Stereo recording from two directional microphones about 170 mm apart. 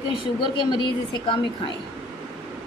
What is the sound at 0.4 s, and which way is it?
A woman's voice, 25° left (ahead or behind).